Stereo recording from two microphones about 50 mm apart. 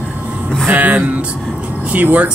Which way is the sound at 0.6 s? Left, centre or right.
Right.